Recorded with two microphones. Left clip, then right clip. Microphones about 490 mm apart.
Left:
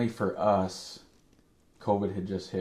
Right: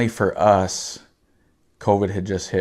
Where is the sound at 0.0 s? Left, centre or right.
Right.